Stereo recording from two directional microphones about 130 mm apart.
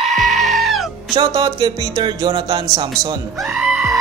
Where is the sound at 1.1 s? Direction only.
35° right (ahead or behind).